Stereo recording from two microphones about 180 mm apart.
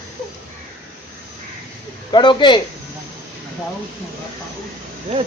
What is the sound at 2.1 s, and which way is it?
Speech, 25° left (ahead or behind).